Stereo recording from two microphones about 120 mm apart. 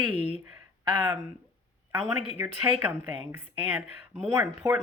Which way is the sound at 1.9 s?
20° right (ahead or behind).